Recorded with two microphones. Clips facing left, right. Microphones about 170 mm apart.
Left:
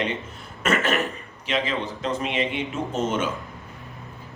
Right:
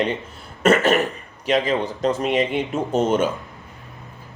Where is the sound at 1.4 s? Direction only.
40° right (ahead or behind).